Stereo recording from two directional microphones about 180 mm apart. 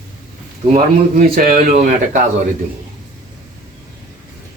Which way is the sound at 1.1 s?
50° right (ahead or behind).